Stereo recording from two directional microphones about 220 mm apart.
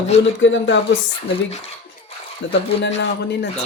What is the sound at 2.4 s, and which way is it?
Speech, 55° left (ahead or behind).